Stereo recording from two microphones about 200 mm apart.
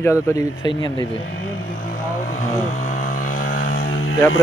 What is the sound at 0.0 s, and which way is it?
Speech, 15° left (ahead or behind).